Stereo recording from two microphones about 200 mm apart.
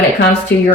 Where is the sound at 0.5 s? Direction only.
10° left (ahead or behind).